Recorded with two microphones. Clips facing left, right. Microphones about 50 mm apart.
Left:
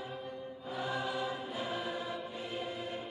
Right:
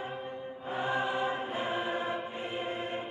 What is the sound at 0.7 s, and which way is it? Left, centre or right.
Choir, right.